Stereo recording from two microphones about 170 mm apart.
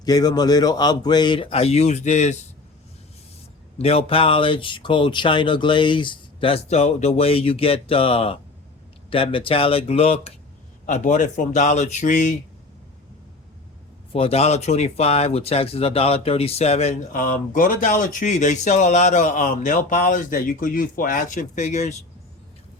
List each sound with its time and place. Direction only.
0.0 s speech: 25° left (ahead or behind); by 2.4 s 40° left (ahead or behind)
3.8 s speech: 35° left (ahead or behind)
10.8 s speech: 45° left (ahead or behind)
14.1 s speech: 35° left (ahead or behind)